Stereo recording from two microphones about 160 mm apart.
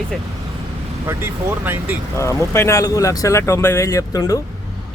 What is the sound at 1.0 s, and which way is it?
Speech, 15° right (ahead or behind).